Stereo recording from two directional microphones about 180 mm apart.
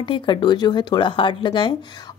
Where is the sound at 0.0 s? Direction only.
25° left (ahead or behind).